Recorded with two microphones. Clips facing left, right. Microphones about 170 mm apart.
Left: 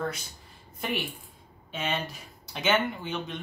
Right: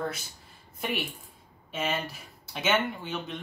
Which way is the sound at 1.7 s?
Centre (ahead or behind).